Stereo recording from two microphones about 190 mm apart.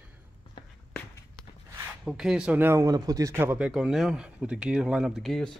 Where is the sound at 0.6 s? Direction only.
25° left (ahead or behind).